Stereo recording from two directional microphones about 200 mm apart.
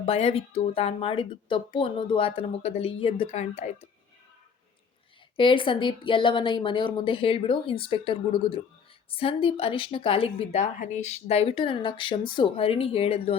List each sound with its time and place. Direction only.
0.0 s speech: 30° left (ahead or behind)
5.4 s speech: 25° left (ahead or behind)